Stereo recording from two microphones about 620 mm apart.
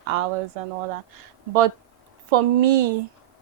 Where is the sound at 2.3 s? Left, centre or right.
Right.